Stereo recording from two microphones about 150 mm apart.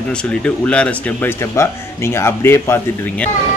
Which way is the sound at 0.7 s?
10° left (ahead or behind).